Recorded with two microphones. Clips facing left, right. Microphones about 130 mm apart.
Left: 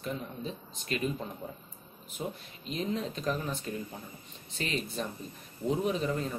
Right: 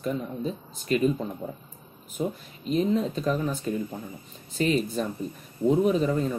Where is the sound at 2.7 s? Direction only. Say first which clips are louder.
Right 9 dB; 40° right (ahead or behind).